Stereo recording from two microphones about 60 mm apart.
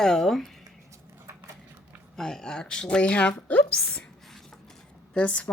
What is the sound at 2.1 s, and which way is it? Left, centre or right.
A woman's voice, centre.